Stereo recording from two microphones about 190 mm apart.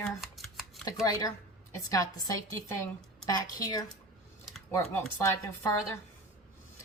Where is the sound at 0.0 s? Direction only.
Centre (ahead or behind).